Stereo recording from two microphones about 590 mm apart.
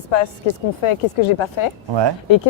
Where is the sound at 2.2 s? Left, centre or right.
Left.